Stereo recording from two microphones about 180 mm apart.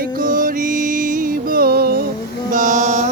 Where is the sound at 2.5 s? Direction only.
45° right (ahead or behind).